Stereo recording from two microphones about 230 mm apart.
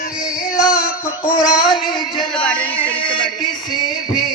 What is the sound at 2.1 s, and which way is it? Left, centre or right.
Speech, centre.